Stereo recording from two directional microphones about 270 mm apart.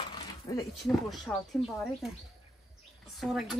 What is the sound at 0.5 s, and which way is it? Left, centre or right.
Speech, centre.